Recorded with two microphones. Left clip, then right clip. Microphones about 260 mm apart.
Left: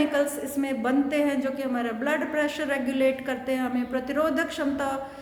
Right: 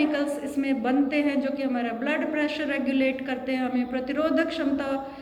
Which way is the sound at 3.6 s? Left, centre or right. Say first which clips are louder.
Even; left.